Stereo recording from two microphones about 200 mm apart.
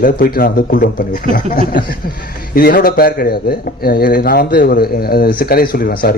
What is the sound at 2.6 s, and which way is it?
A man's voice, 50° left (ahead or behind).